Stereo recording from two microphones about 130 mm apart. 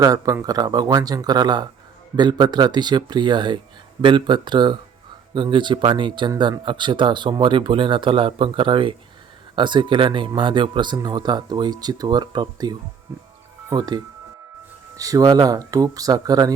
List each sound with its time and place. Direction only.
0.0 s speech: 25° right (ahead or behind)
13.1 s speech: 20° right (ahead or behind)
13.7 s speech: 30° right (ahead or behind)